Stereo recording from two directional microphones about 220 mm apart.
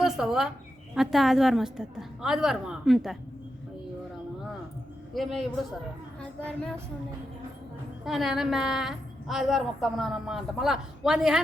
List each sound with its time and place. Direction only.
0.0 s a woman's voice: centre (ahead or behind)
5.1 s a woman's voice: centre (ahead or behind)
8.0 s a woman's voice: centre (ahead or behind)